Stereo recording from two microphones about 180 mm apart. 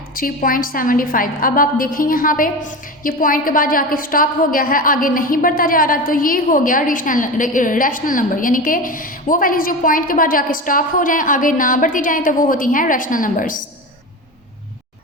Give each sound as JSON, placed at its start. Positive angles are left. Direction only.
{"t": 0.1, "sound": "a woman's voice", "side_deg": 50}